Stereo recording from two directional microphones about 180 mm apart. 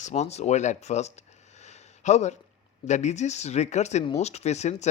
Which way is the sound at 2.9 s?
40° left (ahead or behind).